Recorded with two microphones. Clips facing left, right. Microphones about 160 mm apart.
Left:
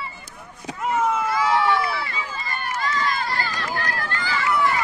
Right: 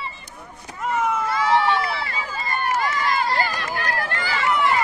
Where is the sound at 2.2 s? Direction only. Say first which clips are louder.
Right 3 dB; 40° right (ahead or behind).